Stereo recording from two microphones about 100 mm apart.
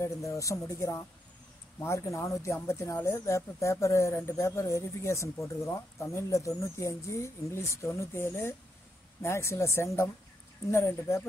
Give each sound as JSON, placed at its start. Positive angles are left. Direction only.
{"t": 0.0, "sound": "speech", "side_deg": 30}